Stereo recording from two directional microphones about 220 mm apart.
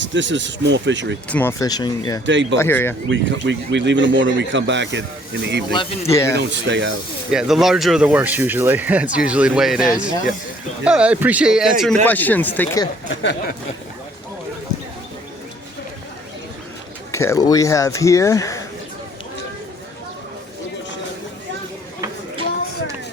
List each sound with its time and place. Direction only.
0.0 s speech: 55° right (ahead or behind)
1.3 s speech: 10° left (ahead or behind)
2.2 s speech: 55° right (ahead or behind)
2.6 s speech: 10° left (ahead or behind)
3.1 s speech: 55° right (ahead or behind)
5.7 s speech: 15° left (ahead or behind)
6.3 s speech: 55° right (ahead or behind)
7.3 s speech: centre (ahead or behind)
12.0 s speech: 10° left (ahead or behind)
17.1 s speech: 15° left (ahead or behind)